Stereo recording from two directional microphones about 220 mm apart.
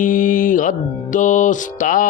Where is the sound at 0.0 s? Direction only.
35° left (ahead or behind).